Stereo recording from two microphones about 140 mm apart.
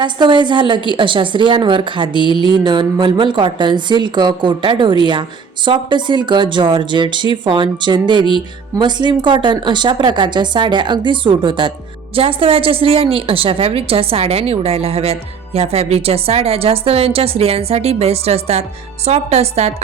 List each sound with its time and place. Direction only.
0.0 s a woman's voice: 35° right (ahead or behind); by 19.7 s 50° right (ahead or behind)